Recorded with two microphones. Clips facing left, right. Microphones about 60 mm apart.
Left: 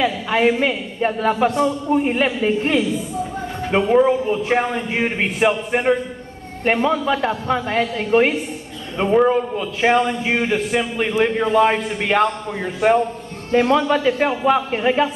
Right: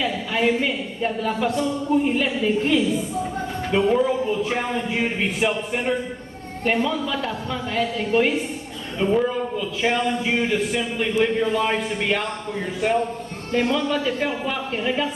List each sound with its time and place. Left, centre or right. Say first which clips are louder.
0.0 s a man's voice: left 5 dB; left
1.5 s a woman's voice: left 3 dB; left
13.5 s a man's voice: left 6 dB; left